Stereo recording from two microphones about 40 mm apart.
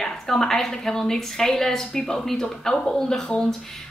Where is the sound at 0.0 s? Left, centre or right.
Centre.